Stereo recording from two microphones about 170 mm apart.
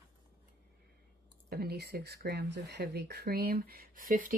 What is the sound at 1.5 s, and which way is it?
Speech, 65° right (ahead or behind).